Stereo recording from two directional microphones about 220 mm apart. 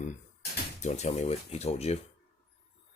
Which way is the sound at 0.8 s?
35° left (ahead or behind).